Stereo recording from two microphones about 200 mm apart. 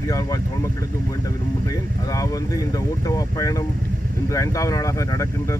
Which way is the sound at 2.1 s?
15° left (ahead or behind).